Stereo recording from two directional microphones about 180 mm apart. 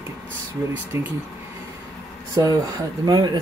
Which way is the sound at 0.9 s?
15° right (ahead or behind).